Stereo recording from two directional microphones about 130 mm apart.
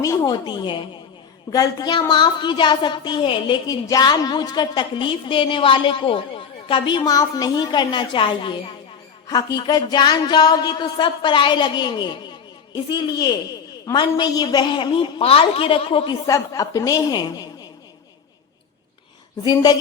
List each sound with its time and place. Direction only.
0.0 s a woman's voice: 25° left (ahead or behind); by 16.1 s 45° left (ahead or behind)
16.2 s a woman's voice: 25° left (ahead or behind)
19.4 s a woman's voice: 30° left (ahead or behind)